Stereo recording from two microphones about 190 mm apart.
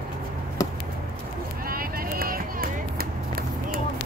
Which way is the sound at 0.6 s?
20° left (ahead or behind).